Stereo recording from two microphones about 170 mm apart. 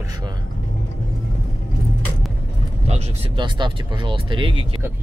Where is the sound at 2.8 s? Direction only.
40° right (ahead or behind).